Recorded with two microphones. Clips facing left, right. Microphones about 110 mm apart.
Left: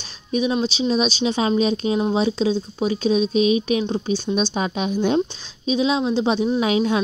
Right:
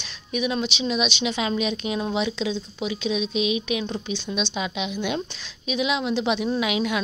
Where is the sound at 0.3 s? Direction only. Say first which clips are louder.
Left 5 dB; 25° left (ahead or behind).